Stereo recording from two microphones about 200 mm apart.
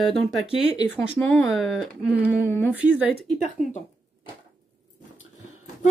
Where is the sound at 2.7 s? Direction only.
5° right (ahead or behind).